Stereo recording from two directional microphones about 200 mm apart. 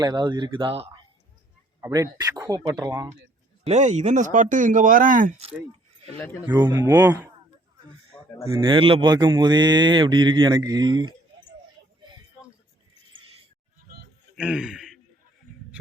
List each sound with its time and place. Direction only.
0.0 s speech: 20° right (ahead or behind)
3.7 s speech: 35° right (ahead or behind)
6.4 s speech: 10° right (ahead or behind)
8.1 s a sound: 10° left (ahead or behind)
8.4 s speech: 20° right (ahead or behind)
14.3 s a man's voice: 5° right (ahead or behind)